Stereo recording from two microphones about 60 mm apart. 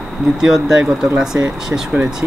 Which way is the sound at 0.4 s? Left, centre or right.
Centre.